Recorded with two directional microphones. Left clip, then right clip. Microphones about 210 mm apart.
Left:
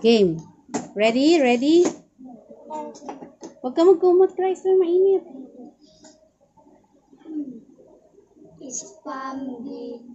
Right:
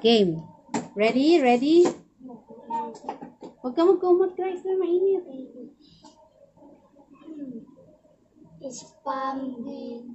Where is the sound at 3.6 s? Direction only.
35° left (ahead or behind).